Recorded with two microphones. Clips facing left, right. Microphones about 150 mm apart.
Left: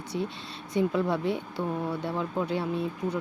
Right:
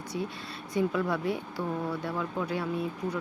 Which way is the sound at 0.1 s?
25° left (ahead or behind).